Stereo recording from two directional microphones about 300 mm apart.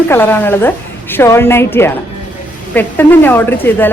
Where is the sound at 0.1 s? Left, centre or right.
Centre.